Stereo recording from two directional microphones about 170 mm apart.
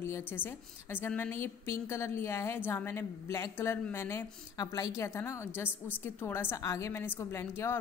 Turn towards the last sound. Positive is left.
turn(degrees=15)  # may be behind; listen again after turning